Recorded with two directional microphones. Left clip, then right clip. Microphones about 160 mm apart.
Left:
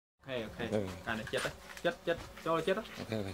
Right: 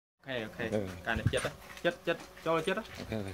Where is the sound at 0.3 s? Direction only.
30° right (ahead or behind).